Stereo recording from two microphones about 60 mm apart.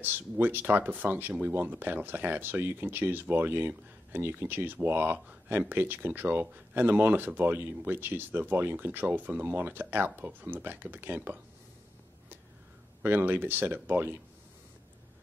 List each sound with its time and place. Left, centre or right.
0.0 s speech: right
13.0 s speech: right